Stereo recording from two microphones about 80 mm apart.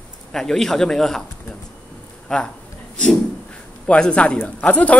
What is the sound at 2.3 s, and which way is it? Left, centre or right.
Speech, centre.